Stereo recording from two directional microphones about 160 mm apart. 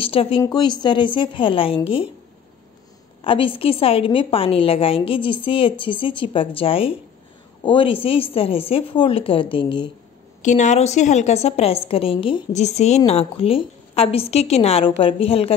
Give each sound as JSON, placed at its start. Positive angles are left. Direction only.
{"t": 0.0, "sound": "a woman's voice", "side_deg": 35}
{"t": 3.3, "sound": "a woman's voice", "side_deg": 35}
{"t": 10.4, "sound": "a woman's voice", "side_deg": 50}
{"t": 12.5, "sound": "a woman's voice", "side_deg": 45}